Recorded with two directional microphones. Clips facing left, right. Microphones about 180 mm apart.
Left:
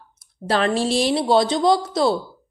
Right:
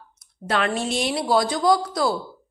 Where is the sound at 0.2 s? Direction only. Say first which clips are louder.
Left 3 dB; 30° left (ahead or behind).